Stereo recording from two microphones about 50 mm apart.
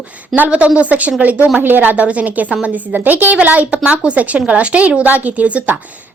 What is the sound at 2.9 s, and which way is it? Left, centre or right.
A woman's voice, right.